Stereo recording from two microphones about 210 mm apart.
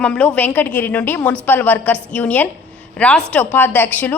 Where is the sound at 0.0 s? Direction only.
5° left (ahead or behind).